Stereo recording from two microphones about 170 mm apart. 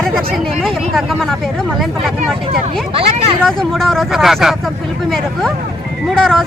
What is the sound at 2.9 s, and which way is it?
Speech, 35° right (ahead or behind).